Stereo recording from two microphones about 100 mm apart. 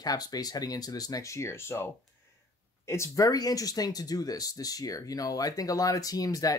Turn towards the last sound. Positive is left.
turn(degrees=35)  # may be behind; listen again after turning